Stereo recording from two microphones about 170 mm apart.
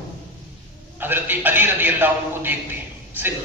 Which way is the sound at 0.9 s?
10° right (ahead or behind).